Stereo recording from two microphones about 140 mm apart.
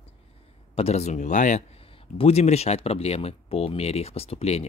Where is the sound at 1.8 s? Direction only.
40° left (ahead or behind).